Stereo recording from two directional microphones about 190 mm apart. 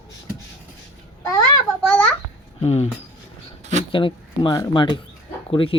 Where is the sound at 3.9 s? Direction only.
25° left (ahead or behind).